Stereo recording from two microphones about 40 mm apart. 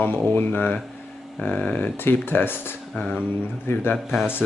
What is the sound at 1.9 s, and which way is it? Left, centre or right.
Speech, left.